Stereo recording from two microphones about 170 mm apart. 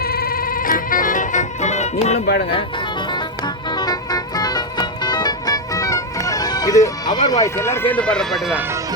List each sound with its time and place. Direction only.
0.0 s music: 65° left (ahead or behind); by 2.2 s 40° left (ahead or behind)
2.2 s speech: 75° left (ahead or behind)
3.1 s music: 25° left (ahead or behind); by 8.6 s centre (ahead or behind)